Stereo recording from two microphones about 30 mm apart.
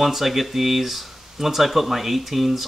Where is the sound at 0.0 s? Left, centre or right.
Centre.